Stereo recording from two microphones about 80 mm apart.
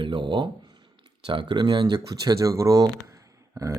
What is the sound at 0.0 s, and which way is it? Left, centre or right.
Speech, right.